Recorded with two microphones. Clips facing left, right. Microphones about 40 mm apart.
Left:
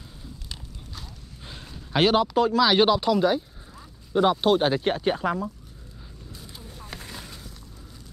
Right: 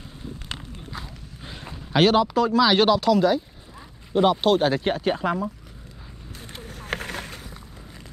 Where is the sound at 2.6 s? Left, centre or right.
Centre.